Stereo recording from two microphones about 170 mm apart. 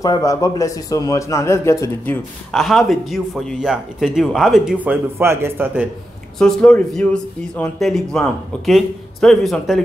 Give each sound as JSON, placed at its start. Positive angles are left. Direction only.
{"t": 0.0, "sound": "a man's voice", "side_deg": 20}
{"t": 2.5, "sound": "speech", "side_deg": 0}
{"t": 6.3, "sound": "speech", "side_deg": 5}